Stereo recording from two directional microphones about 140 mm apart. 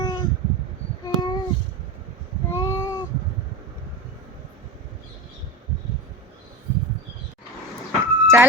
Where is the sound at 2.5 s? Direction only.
20° left (ahead or behind).